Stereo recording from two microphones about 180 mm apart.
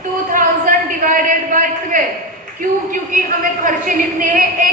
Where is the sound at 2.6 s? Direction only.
50° right (ahead or behind).